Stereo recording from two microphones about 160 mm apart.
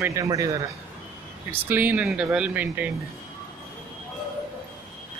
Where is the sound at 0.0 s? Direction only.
20° right (ahead or behind).